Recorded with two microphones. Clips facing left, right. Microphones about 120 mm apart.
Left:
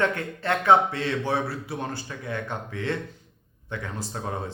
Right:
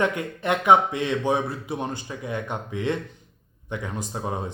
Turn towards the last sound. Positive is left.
turn(degrees=-15)  # may be behind; listen again after turning